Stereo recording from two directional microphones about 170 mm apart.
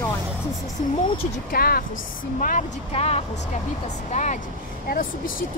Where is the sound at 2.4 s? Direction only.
50° left (ahead or behind).